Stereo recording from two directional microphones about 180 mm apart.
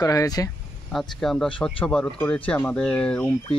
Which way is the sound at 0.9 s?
Centre (ahead or behind).